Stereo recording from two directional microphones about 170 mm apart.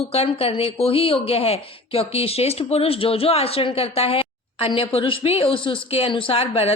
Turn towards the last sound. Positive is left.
turn(degrees=35)  # may be behind; listen again after turning